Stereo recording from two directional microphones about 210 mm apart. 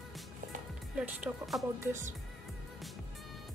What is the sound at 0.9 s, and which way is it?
A woman's voice, 5° right (ahead or behind).